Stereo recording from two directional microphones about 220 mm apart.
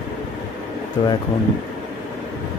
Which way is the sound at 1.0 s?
20° left (ahead or behind).